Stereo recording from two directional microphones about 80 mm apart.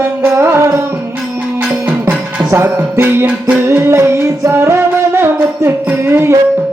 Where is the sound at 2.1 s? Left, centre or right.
Right.